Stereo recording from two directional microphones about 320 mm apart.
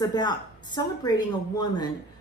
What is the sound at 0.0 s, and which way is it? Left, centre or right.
A woman's voice, centre.